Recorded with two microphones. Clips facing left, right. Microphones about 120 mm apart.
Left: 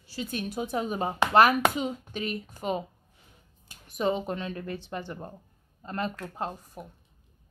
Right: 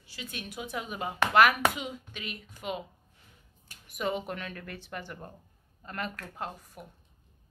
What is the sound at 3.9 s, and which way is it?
A woman's voice, 30° left (ahead or behind).